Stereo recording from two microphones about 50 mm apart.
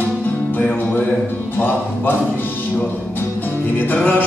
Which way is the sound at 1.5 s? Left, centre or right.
Left.